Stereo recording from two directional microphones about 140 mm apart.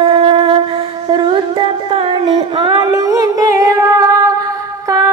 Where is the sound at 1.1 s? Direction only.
35° right (ahead or behind).